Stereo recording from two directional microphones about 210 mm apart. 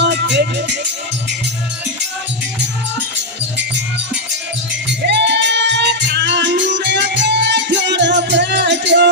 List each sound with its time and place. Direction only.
0.0 s music: 55° right (ahead or behind)
5.0 s music: 55° right (ahead or behind)